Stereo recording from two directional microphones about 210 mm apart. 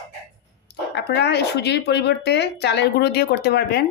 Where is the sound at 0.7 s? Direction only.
55° left (ahead or behind).